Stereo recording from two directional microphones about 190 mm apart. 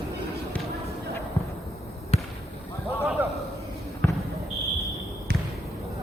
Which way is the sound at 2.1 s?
30° left (ahead or behind).